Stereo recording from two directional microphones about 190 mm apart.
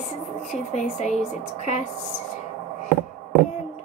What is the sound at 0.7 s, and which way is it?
A woman's voice, 40° left (ahead or behind).